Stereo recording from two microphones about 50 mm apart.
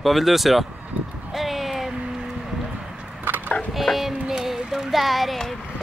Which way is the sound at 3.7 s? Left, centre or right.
Centre.